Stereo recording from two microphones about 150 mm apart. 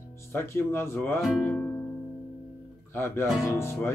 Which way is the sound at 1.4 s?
10° left (ahead or behind).